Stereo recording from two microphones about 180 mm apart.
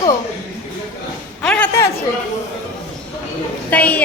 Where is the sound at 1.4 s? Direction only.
10° left (ahead or behind).